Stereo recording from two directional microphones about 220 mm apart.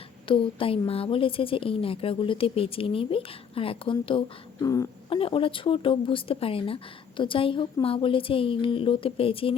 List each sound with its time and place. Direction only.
0.3 s speech: 25° left (ahead or behind)